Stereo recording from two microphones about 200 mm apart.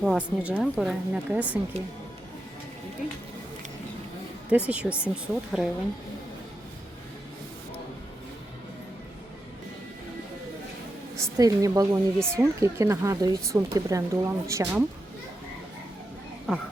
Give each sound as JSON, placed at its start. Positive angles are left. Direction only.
{"t": 0.0, "sound": "speech", "side_deg": 0}
{"t": 4.4, "sound": "speech", "side_deg": -5}
{"t": 11.2, "sound": "speech", "side_deg": -15}
{"t": 16.5, "sound": "speech", "side_deg": 0}